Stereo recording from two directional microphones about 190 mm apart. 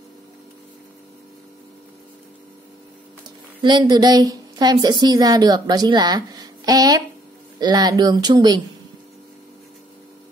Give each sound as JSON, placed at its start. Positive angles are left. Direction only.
{"t": 3.6, "sound": "a woman's voice", "side_deg": -20}